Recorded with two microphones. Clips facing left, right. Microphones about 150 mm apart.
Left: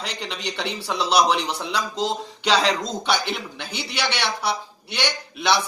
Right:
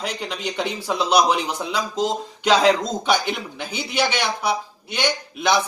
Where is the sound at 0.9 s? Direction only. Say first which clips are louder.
Right 2 dB; 50° right (ahead or behind).